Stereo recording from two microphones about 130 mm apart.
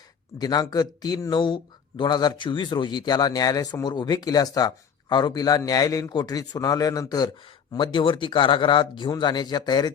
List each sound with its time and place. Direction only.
0.3 s a man's voice: 30° left (ahead or behind)